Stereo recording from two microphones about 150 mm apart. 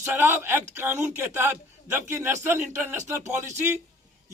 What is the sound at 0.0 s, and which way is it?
Speech, 15° right (ahead or behind).